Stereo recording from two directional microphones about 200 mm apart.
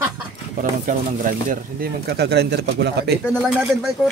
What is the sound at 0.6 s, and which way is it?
Speech, 40° right (ahead or behind).